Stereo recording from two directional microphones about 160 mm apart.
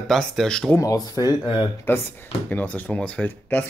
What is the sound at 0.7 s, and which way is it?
Speech, 20° left (ahead or behind).